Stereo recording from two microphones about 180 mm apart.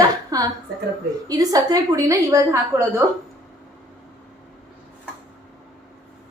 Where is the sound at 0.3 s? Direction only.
20° right (ahead or behind).